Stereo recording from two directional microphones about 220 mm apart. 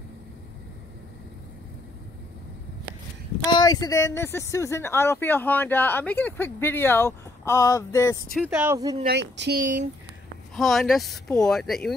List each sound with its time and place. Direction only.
3.4 s speech: 20° left (ahead or behind)
8.3 s speech: 5° right (ahead or behind)
9.0 s speech: 50° right (ahead or behind)
10.5 s speech: centre (ahead or behind)